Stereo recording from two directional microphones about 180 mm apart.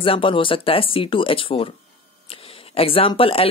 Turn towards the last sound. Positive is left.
turn(degrees=30)  # may be behind; listen again after turning